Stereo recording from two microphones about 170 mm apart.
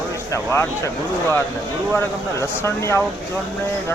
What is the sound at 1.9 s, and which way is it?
Speech, 15° left (ahead or behind).